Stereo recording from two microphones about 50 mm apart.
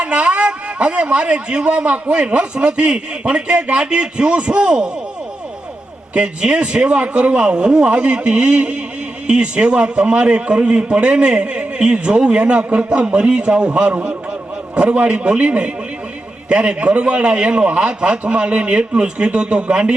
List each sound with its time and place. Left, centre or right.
0.0 s a man's voice: right
6.1 s a man's voice: right